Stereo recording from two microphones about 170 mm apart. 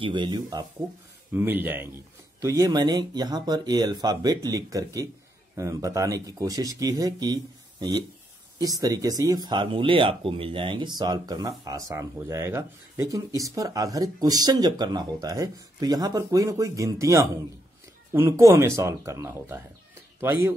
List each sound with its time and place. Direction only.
0.0 s speech: 25° right (ahead or behind)
1.3 s speech: 10° right (ahead or behind)
8.5 s speech: 20° right (ahead or behind)